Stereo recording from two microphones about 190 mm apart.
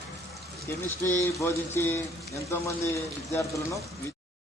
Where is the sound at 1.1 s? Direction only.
15° left (ahead or behind).